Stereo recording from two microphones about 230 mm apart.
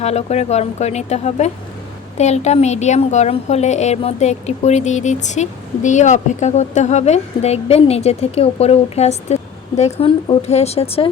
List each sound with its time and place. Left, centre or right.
0.0 s a woman's voice: left